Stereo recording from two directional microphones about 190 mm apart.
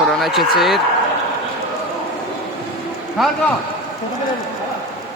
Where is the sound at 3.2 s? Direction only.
Centre (ahead or behind).